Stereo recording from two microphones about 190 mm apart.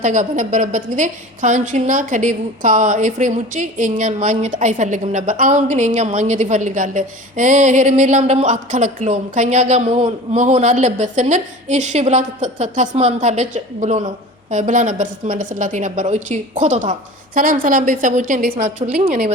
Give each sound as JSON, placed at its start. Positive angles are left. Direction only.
{"t": 0.0, "sound": "a woman's voice", "side_deg": -40}